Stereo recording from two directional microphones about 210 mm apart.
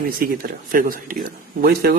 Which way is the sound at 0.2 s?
45° right (ahead or behind).